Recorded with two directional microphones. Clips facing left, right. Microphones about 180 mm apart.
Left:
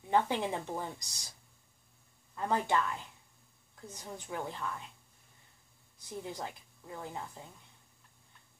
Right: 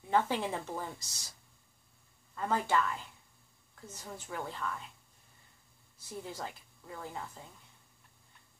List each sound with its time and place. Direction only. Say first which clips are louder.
0.1 s speech: left 1 dB; 15° left (ahead or behind)
2.3 s speech: even; 15° left (ahead or behind)
5.9 s speech: left 1 dB; 15° left (ahead or behind)